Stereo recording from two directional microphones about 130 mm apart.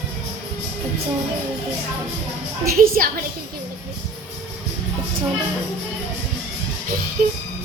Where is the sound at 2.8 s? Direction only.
90° right.